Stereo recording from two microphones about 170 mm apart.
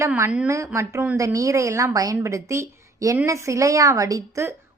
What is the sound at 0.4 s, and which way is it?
A woman's voice, 15° right (ahead or behind).